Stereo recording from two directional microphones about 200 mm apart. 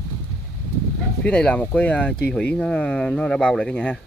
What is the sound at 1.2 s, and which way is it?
Speech, 5° left (ahead or behind).